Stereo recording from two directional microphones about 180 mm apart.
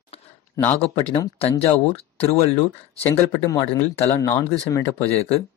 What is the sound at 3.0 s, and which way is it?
Speech, 15° left (ahead or behind).